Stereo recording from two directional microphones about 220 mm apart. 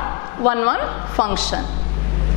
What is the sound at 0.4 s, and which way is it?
A woman's voice, 10° left (ahead or behind).